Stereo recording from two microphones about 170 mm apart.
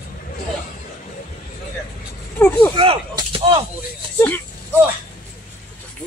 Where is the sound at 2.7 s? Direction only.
30° right (ahead or behind).